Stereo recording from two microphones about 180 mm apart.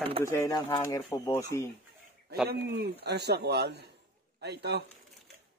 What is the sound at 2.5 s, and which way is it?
Speech, 75° right (ahead or behind).